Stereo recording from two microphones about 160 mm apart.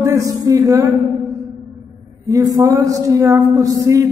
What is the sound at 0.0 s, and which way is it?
Speech, 20° right (ahead or behind).